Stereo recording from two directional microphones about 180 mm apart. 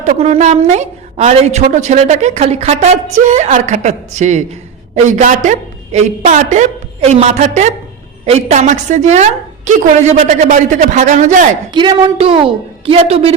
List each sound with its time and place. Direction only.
0.0 s a woman's voice: 40° right (ahead or behind)
11.7 s a woman's voice: 25° right (ahead or behind)